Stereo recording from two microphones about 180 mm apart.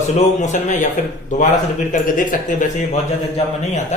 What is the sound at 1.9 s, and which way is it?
Speech, 45° left (ahead or behind).